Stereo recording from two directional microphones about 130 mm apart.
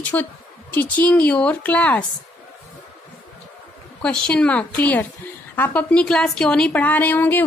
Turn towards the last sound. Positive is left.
turn(degrees=15)  # may be behind; listen again after turning